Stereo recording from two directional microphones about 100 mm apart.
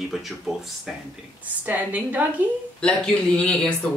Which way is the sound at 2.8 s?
10° left (ahead or behind).